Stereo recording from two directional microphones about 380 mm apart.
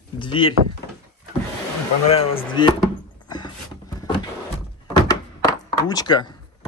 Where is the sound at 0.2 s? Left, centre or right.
Centre.